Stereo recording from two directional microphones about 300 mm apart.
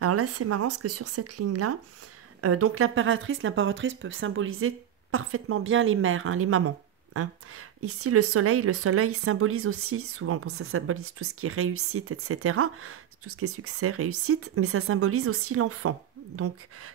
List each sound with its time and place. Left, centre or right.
0.0 s speech: right